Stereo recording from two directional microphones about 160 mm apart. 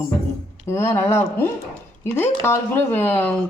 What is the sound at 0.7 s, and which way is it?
A woman's voice, 15° left (ahead or behind).